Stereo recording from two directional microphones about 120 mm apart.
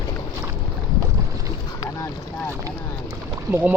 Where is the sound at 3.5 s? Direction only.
20° right (ahead or behind).